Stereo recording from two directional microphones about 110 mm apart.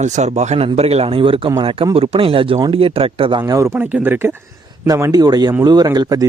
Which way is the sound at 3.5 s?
20° right (ahead or behind).